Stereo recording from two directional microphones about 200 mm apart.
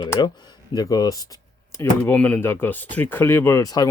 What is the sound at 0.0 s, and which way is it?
Speech, 20° left (ahead or behind).